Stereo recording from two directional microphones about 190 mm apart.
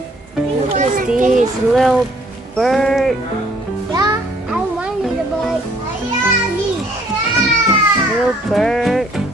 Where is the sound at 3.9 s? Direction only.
20° right (ahead or behind).